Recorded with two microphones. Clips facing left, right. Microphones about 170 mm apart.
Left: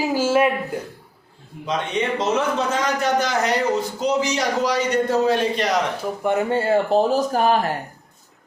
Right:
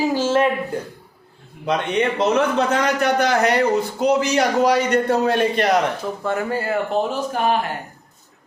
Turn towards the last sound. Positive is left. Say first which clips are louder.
# left 2 dB
turn(degrees=40)  # may be behind; listen again after turning